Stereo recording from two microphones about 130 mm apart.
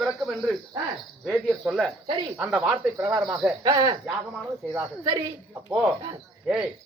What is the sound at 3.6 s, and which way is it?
Speech, 30° right (ahead or behind).